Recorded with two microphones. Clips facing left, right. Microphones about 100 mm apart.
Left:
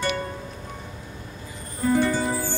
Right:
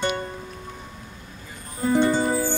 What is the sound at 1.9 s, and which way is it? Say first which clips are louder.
Music: right 3 dB; 20° right (ahead or behind).